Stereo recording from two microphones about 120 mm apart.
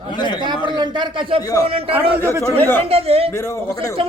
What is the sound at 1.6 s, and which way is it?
A man's voice, 50° right (ahead or behind).